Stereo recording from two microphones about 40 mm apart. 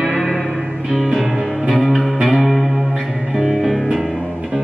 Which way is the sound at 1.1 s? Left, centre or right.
Centre.